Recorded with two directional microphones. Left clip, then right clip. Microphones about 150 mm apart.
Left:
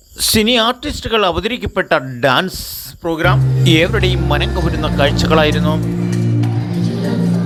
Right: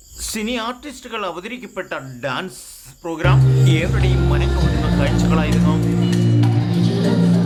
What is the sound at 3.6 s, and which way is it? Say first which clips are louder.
Speech: left 8 dB; 45° left (ahead or behind).